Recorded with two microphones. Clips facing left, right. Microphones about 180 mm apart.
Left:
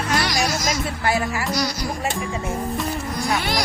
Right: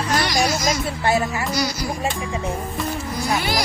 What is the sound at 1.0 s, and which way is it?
Music, 25° right (ahead or behind).